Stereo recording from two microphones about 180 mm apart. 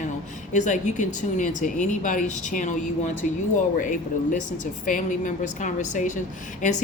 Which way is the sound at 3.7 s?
45° left (ahead or behind).